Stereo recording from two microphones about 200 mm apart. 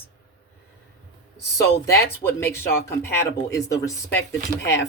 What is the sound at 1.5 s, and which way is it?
Speech, 15° left (ahead or behind).